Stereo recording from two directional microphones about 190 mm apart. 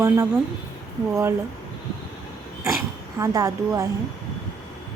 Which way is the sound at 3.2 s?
15° right (ahead or behind).